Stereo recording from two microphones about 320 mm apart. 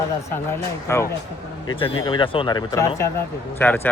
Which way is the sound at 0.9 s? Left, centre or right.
Centre.